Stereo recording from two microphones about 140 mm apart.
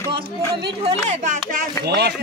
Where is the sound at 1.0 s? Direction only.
65° right (ahead or behind).